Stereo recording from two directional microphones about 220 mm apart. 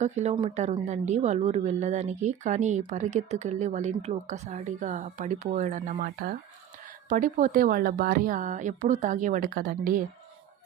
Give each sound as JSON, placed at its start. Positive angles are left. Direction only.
{"t": 0.0, "sound": "speech", "side_deg": -30}